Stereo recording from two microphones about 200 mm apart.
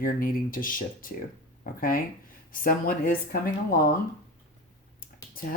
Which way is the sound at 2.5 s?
45° left (ahead or behind).